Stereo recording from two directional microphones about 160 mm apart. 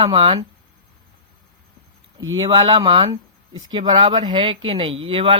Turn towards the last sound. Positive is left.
turn(degrees=-35)  # may be behind; listen again after turning